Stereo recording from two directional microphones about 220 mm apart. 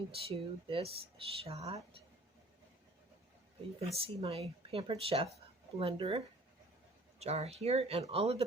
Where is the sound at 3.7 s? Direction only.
25° right (ahead or behind).